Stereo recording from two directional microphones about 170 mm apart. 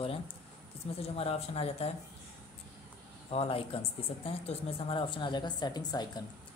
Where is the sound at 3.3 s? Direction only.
35° left (ahead or behind).